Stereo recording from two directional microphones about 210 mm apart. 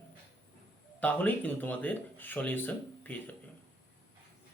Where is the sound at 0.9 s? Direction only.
10° left (ahead or behind).